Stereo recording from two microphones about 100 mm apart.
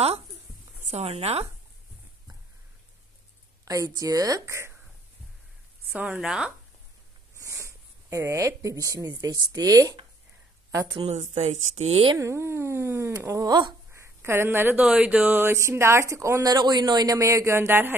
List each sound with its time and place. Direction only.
0.9 s speech: 90° right
3.6 s a woman's voice: 35° right (ahead or behind)
5.9 s speech: 15° right (ahead or behind)
7.3 s a woman's voice: 30° right (ahead or behind)
11.1 s speech: 90° right
12.2 s speech: 30° right (ahead or behind)
13.5 s speech: 50° right (ahead or behind)
13.9 s speech: 25° right (ahead or behind); by 17.2 s 45° right (ahead or behind)
17.2 s speech: 30° right (ahead or behind)